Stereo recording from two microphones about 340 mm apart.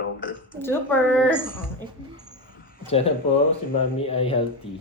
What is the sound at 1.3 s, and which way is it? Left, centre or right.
Speech, left.